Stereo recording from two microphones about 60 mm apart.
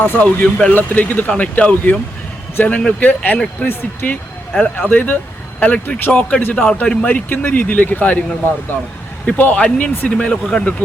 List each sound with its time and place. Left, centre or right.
0.0 s speech: left
9.2 s speech: left